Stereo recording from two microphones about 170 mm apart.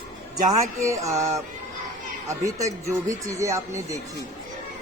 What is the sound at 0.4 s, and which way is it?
Speech, 20° right (ahead or behind).